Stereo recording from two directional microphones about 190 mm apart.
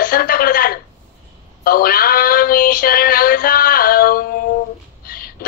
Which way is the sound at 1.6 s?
50° left (ahead or behind).